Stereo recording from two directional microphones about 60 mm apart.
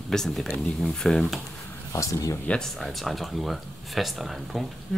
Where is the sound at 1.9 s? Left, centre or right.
Left.